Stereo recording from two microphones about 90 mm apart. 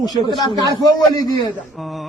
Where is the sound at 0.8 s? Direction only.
50° left (ahead or behind).